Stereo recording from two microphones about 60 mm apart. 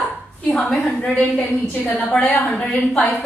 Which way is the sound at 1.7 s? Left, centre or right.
Left.